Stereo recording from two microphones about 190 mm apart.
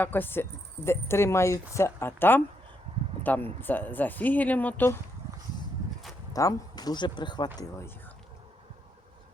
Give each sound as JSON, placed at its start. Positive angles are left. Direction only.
{"t": 0.0, "sound": "speech", "side_deg": 10}
{"t": 6.3, "sound": "speech", "side_deg": 20}